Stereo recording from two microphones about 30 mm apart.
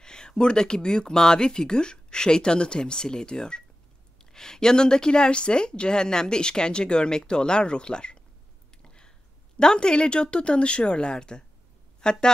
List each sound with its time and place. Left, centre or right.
0.0 s a woman's voice: left
8.8 s a sound: left
9.6 s speech: left